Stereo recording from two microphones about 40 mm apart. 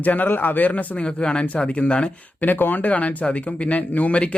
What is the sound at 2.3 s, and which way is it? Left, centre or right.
Speech, left.